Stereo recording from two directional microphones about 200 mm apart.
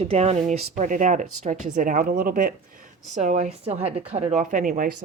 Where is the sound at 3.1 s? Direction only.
35° right (ahead or behind).